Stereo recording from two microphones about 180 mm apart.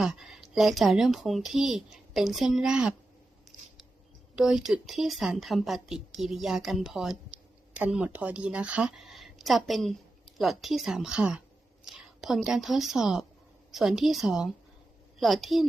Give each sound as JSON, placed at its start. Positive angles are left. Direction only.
{"t": 0.0, "sound": "speech", "side_deg": 0}
{"t": 4.4, "sound": "a woman's voice", "side_deg": -5}